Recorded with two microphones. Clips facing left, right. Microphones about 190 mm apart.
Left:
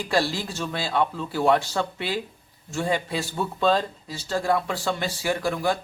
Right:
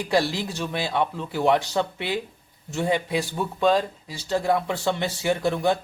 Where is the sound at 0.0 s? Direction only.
20° right (ahead or behind).